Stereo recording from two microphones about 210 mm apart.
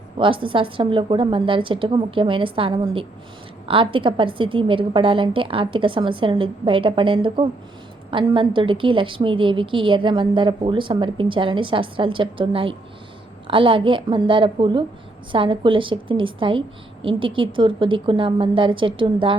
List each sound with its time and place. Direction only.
0.2 s a woman's voice: 25° right (ahead or behind)